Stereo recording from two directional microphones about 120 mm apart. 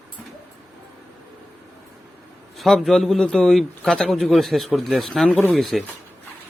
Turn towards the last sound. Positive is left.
turn(degrees=0)  # may be behind; listen again after turning